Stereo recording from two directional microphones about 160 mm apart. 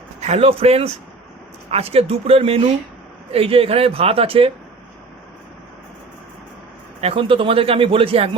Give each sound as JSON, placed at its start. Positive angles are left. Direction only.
{"t": 0.2, "sound": "speech", "side_deg": -40}
{"t": 7.0, "sound": "speech", "side_deg": -35}